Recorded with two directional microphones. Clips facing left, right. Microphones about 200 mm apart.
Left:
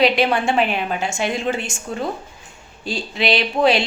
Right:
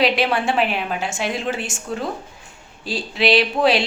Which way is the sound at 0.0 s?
Centre (ahead or behind).